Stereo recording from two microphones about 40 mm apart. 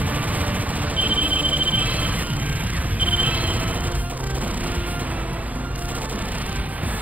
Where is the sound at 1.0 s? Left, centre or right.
Right.